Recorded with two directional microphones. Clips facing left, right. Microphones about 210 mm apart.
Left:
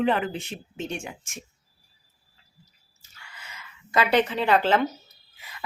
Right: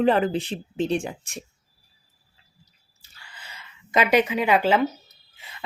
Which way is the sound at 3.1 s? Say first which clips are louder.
Even; 30° right (ahead or behind).